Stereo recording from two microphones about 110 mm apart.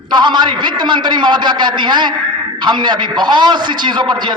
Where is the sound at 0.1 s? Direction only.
45° right (ahead or behind).